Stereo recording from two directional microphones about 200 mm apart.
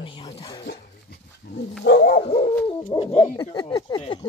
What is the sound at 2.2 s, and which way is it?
Speech, 30° left (ahead or behind).